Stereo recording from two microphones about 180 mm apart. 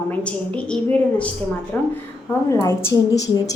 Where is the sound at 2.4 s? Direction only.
15° left (ahead or behind).